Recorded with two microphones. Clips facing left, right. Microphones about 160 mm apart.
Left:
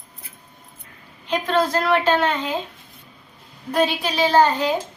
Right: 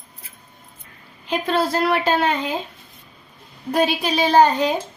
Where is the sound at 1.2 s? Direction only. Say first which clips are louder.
Even; 10° right (ahead or behind).